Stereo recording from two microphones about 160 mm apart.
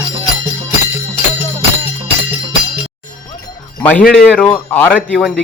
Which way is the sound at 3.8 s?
10° left (ahead or behind).